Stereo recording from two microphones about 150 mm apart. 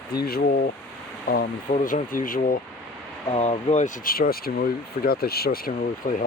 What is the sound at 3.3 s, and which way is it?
Speech, 45° left (ahead or behind).